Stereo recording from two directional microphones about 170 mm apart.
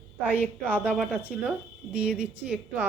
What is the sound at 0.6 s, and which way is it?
Speech, 10° right (ahead or behind).